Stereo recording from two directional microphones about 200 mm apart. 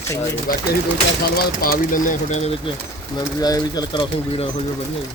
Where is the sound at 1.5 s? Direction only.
45° left (ahead or behind).